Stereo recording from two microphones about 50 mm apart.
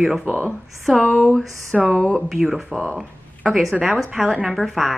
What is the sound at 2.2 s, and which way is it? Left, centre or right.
Speech, centre.